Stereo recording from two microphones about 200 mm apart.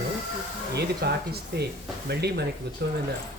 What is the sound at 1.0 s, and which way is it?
Speech, 55° right (ahead or behind).